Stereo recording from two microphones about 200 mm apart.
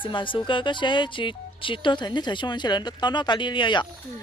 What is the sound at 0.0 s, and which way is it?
Speech, 25° left (ahead or behind).